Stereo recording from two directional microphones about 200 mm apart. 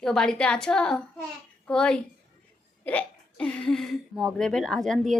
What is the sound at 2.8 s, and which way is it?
Hiccup, 5° left (ahead or behind).